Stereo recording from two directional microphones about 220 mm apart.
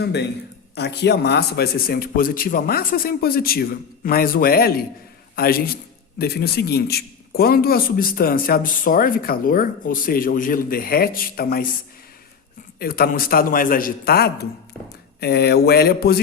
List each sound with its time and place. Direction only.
0.0 s a man's voice: 50° left (ahead or behind)
12.8 s a man's voice: 40° left (ahead or behind)